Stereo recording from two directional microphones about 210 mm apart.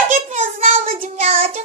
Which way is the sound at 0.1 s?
35° right (ahead or behind).